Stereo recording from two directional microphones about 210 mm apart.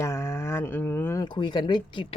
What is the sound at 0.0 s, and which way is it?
Speech, 15° left (ahead or behind).